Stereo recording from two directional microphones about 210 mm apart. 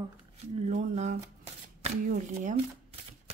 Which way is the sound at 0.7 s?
35° right (ahead or behind).